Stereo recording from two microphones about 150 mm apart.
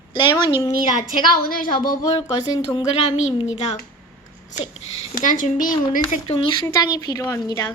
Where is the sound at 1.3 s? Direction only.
75° left (ahead or behind).